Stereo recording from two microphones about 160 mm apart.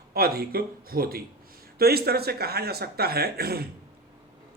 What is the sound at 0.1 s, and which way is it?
Speech, 70° right (ahead or behind).